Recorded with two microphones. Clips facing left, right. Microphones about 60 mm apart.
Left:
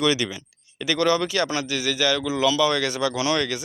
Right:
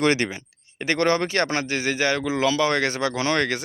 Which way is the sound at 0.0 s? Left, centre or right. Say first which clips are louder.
Right 1 dB; right.